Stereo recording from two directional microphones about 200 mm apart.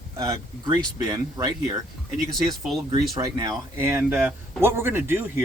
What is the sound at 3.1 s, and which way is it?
A man's voice, 20° right (ahead or behind).